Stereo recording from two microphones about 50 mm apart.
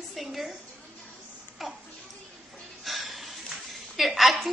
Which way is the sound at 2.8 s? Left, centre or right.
Centre.